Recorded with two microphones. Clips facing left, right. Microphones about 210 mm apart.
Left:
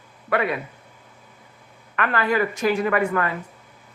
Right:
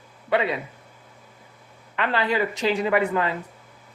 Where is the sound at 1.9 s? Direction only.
20° right (ahead or behind).